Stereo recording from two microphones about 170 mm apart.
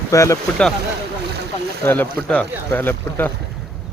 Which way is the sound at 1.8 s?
10° left (ahead or behind).